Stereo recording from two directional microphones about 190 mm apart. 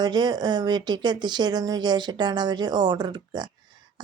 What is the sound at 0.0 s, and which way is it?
Speech, 25° right (ahead or behind).